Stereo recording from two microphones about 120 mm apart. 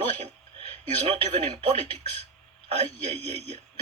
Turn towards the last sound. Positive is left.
turn(degrees=-60)  # may be behind; listen again after turning